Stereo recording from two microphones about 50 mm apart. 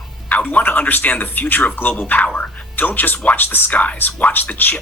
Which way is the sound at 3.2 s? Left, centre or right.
Left.